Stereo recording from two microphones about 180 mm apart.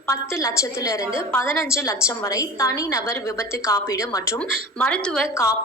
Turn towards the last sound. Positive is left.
turn(degrees=5)  # may be behind; listen again after turning